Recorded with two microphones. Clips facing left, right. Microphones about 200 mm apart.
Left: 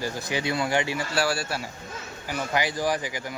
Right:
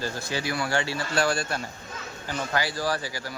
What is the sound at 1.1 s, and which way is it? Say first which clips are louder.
Speech: right 2 dB; 5° left (ahead or behind).